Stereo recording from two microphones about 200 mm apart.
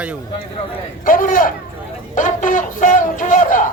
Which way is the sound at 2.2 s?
40° left (ahead or behind).